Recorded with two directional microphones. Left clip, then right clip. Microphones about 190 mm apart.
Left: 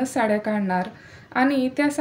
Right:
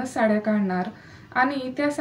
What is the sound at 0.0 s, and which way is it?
A woman's voice, 45° left (ahead or behind).